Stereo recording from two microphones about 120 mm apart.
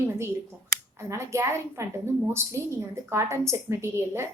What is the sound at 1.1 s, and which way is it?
A woman's voice, 25° right (ahead or behind).